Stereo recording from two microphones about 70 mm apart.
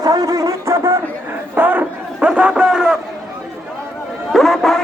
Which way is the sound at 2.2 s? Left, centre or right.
Centre.